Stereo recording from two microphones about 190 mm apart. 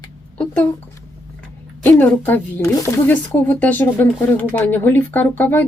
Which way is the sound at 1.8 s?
10° left (ahead or behind).